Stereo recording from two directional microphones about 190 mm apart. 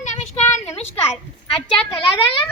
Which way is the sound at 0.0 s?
40° left (ahead or behind).